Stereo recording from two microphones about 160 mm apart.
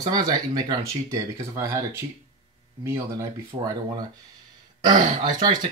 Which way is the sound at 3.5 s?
25° right (ahead or behind).